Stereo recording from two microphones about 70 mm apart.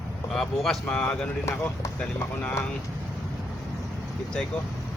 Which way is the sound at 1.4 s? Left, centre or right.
Left.